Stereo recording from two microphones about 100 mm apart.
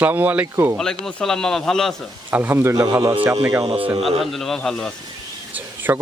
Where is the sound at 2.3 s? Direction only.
25° right (ahead or behind).